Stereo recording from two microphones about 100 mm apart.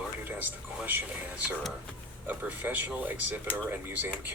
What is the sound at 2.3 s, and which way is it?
Speech, 15° right (ahead or behind).